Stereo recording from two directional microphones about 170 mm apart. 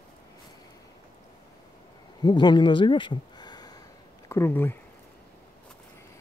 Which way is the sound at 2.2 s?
25° left (ahead or behind).